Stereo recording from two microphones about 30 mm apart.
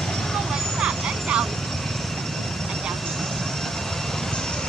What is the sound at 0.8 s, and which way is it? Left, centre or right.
Vehicle, right.